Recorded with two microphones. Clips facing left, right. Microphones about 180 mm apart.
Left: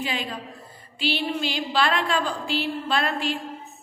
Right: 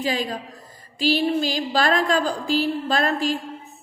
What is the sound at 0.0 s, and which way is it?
A woman's voice, 40° right (ahead or behind).